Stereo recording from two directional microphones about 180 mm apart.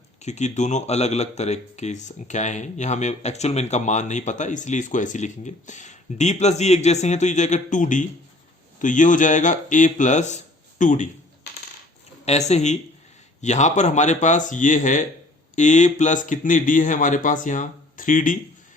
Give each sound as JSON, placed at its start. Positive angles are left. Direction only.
{"t": 0.2, "sound": "a man's voice", "side_deg": 40}
{"t": 12.2, "sound": "speech", "side_deg": 35}